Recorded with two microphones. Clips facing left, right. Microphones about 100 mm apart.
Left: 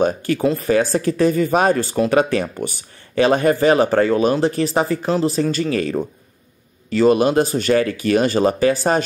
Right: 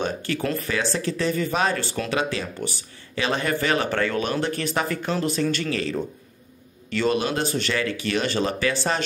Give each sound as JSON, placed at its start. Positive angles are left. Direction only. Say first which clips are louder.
{"t": 0.6, "sound": "speech", "louder": "left 9 dB", "side_deg": 40}